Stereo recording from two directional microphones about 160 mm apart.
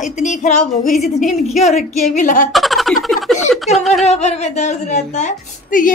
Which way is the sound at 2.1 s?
55° left (ahead or behind).